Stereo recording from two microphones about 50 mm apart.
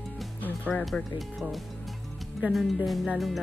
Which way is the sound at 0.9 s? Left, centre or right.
Centre.